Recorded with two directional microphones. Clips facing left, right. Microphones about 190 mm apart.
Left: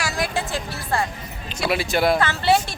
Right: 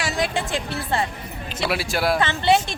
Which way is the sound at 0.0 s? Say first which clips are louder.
Right 1 dB; 20° right (ahead or behind).